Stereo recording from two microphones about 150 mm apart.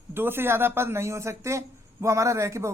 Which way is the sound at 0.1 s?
15° right (ahead or behind).